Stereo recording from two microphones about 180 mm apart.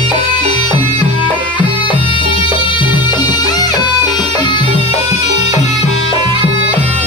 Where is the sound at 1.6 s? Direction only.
10° right (ahead or behind).